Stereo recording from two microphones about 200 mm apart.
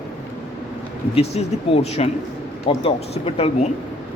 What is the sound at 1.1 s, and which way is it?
Speech, 30° left (ahead or behind).